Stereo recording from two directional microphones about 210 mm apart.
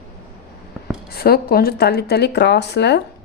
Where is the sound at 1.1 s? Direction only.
45° left (ahead or behind).